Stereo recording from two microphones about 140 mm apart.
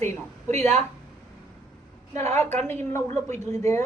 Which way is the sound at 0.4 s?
50° right (ahead or behind).